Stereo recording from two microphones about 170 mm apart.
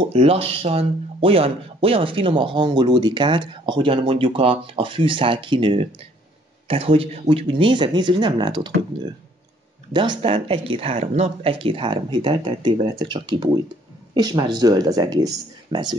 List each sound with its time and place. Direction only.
0.0 s speech: 35° right (ahead or behind)